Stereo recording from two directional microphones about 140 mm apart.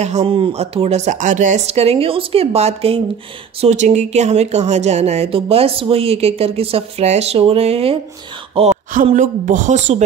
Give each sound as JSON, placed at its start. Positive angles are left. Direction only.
{"t": 0.0, "sound": "speech", "side_deg": -50}
{"t": 3.6, "sound": "speech", "side_deg": -55}
{"t": 9.1, "sound": "a woman's voice", "side_deg": -65}